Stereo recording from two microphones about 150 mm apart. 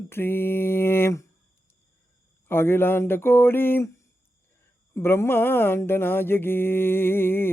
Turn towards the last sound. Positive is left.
turn(degrees=15)  # may be behind; listen again after turning